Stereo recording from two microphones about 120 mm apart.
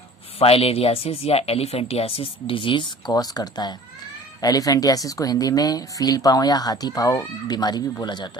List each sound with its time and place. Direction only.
0.3 s speech: 55° left (ahead or behind); by 8.3 s 35° left (ahead or behind)